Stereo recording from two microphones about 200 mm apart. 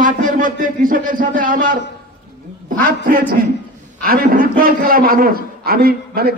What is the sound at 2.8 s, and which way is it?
A man's voice, 45° right (ahead or behind).